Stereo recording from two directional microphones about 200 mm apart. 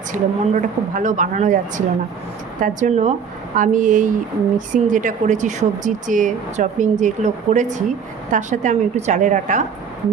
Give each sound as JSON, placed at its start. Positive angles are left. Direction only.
{"t": 0.1, "sound": "speech", "side_deg": -40}